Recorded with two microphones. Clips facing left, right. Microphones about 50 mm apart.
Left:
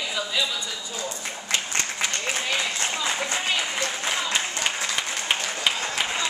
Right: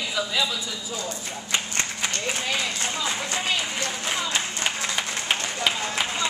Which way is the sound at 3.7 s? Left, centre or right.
Left.